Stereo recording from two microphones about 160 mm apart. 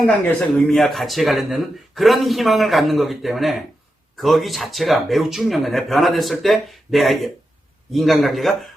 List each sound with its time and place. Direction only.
0.0 s speech: centre (ahead or behind)